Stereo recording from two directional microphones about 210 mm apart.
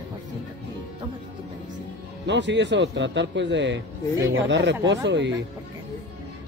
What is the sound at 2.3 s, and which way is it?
Speech, 60° right (ahead or behind).